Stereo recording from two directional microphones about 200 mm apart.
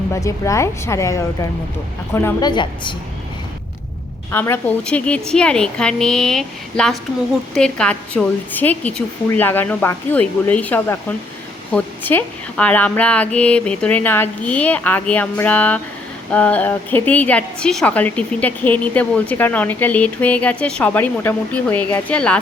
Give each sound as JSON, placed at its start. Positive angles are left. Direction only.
{"t": 0.1, "sound": "a woman's voice", "side_deg": 15}
{"t": 2.5, "sound": "a woman's voice", "side_deg": 25}
{"t": 4.3, "sound": "a woman's voice", "side_deg": 10}